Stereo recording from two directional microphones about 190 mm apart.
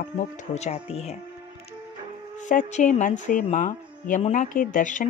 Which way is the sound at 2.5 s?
40° left (ahead or behind).